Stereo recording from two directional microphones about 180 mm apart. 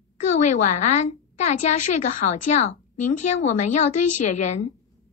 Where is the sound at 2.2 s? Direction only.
40° left (ahead or behind).